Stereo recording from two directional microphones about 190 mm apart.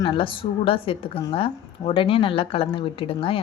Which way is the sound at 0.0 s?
25° left (ahead or behind).